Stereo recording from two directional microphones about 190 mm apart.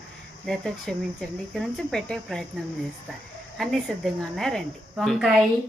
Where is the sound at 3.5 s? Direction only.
Centre (ahead or behind).